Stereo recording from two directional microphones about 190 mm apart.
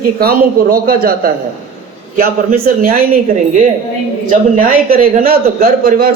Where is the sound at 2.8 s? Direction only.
45° right (ahead or behind).